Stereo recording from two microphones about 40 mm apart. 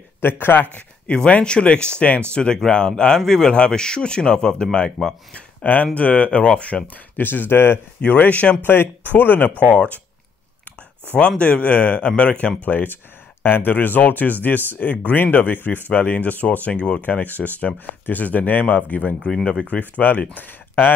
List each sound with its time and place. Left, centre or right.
0.2 s speech: left
1.1 s speech: left
5.6 s speech: left
6.7 s speech: centre
7.2 s speech: left
8.0 s speech: left
9.7 s speech: left
11.1 s speech: left
12.6 s speech: left
17.7 s speech: left
18.2 s speech: left